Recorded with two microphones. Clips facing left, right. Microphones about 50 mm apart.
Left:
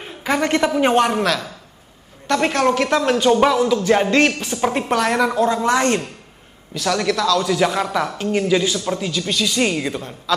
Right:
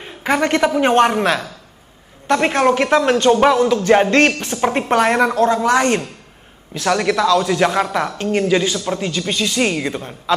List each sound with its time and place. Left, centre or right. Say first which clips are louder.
0.2 s a man's voice: right 2 dB; right; by 1.0 s centre
1.0 s a man's voice: right 3 dB; right
9.2 s speech: right 1 dB; right